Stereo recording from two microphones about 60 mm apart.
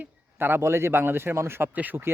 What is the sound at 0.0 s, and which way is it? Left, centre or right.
Speech, right.